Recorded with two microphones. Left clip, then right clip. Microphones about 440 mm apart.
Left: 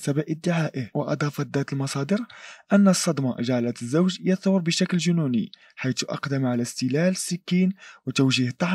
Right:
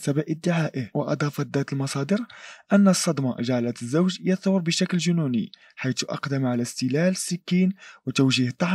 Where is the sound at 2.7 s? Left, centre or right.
Centre; by 5.5 s left.